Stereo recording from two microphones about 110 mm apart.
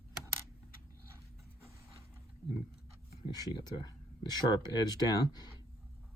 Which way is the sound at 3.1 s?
35° left (ahead or behind).